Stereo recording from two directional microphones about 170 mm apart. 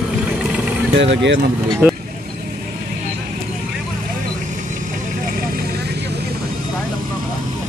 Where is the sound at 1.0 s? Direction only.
90° right.